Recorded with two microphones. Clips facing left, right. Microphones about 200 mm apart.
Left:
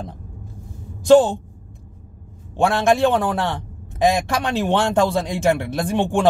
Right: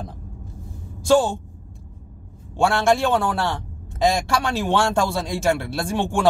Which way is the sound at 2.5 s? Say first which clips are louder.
Left 1 dB; 15° left (ahead or behind).